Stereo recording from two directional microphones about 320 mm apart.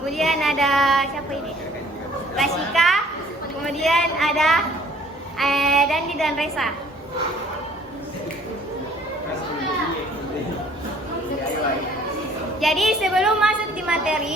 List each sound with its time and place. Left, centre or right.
0.0 s a woman's voice: centre
2.3 s a sound: centre
3.6 s a woman's voice: centre
12.5 s a woman's voice: centre